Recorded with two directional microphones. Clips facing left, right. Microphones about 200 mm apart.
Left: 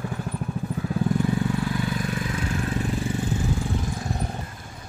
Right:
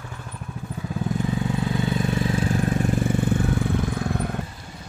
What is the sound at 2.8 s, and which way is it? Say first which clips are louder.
Vehicle: right 4 dB; 50° right (ahead or behind).